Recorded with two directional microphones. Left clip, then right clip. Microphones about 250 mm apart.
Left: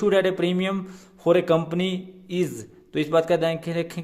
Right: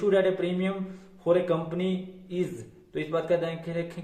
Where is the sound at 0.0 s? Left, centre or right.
Left.